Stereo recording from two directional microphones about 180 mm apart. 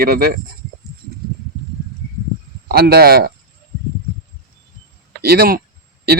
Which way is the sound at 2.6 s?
60° right (ahead or behind).